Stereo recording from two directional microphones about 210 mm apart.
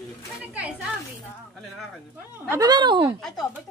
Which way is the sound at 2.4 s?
20° right (ahead or behind).